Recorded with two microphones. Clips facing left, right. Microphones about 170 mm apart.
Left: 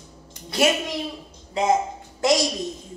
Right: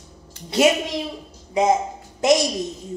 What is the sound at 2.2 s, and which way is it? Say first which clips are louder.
Speech: right 3 dB; 20° right (ahead or behind).